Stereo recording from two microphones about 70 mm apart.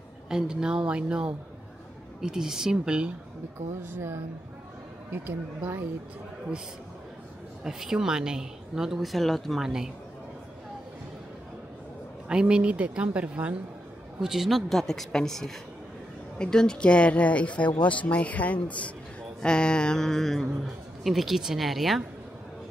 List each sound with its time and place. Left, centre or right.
0.3 s speech: centre
3.5 s speech: right
7.6 s speech: centre
12.3 s speech: centre
14.2 s a man's voice: centre